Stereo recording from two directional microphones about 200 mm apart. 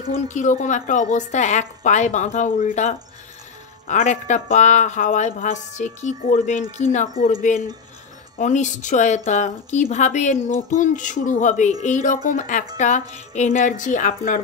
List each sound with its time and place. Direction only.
0.0 s a woman's voice: 40° left (ahead or behind)
8.4 s a woman's voice: 35° left (ahead or behind)